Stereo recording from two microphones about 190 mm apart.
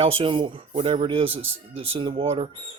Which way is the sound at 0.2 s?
25° right (ahead or behind).